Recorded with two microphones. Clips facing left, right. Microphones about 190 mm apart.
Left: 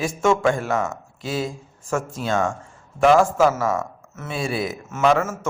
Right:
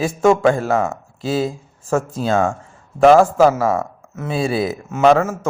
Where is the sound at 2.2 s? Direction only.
35° right (ahead or behind).